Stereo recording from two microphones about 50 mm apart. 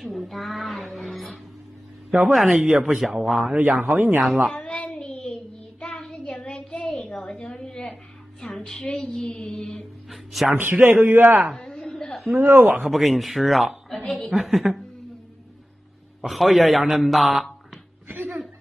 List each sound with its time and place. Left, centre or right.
0.0 s a sound: centre
2.2 s speech: centre
3.5 s speech: right
3.8 s speech: right
4.7 s child singing: left
5.0 s child singing: centre
8.4 s music: centre
10.5 s speech: right
11.5 s a sound: centre
12.4 s speech: right
12.8 s a woman's voice: centre
16.2 s a woman's voice: centre
18.0 s chuckle: right